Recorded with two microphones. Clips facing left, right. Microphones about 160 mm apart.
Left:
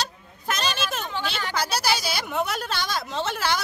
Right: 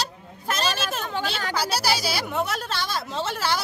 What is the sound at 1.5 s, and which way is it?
A woman's voice, 5° right (ahead or behind).